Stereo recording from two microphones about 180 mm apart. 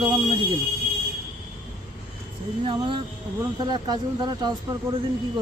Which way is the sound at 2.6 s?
25° right (ahead or behind).